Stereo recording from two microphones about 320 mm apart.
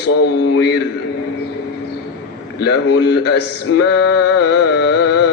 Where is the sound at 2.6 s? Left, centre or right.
Left.